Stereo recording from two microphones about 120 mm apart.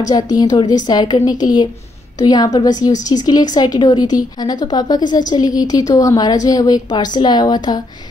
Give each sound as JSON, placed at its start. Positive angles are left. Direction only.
{"t": 0.1, "sound": "a woman's voice", "side_deg": 35}